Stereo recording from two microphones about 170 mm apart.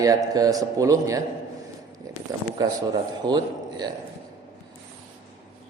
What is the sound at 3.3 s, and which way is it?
Speech, 25° right (ahead or behind).